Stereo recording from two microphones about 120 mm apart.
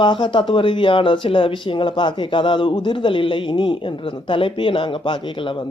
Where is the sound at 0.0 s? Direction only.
40° left (ahead or behind).